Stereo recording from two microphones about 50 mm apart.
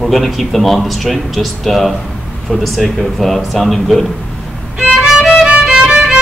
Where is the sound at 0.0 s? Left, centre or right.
Centre.